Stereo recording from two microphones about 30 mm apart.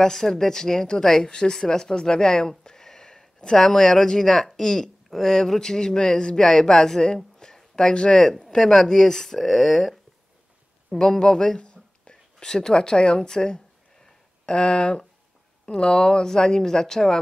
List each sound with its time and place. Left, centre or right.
0.0 s speech: centre
7.3 s a sound: centre
8.1 s speech: centre
11.0 s speech: centre
11.6 s a sound: left
13.3 s speech: left